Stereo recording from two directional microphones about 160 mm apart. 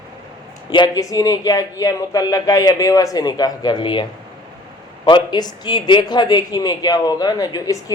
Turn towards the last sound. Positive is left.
turn(degrees=20)  # may be behind; listen again after turning